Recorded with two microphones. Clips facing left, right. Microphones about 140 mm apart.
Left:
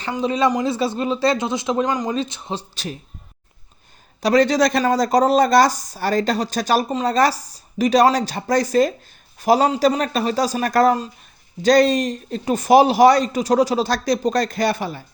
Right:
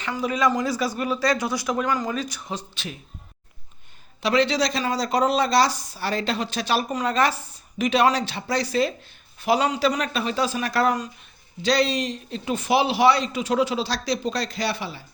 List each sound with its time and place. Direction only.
0.1 s speech: 25° left (ahead or behind)
4.2 s a man's voice: 40° left (ahead or behind)
6.8 s a man's voice: 30° left (ahead or behind); by 15.0 s 45° left (ahead or behind)